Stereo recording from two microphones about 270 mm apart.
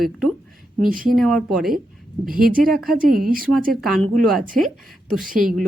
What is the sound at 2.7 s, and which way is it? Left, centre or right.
Speech, centre.